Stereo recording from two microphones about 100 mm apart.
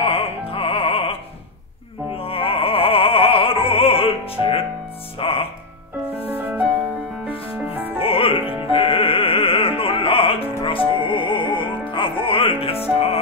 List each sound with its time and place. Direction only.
0.0 s music: 70° left (ahead or behind)
2.1 s opera: 70° left (ahead or behind)
5.2 s music: 70° left (ahead or behind)
6.3 s music: 15° right (ahead or behind)
8.0 s music: 65° left (ahead or behind)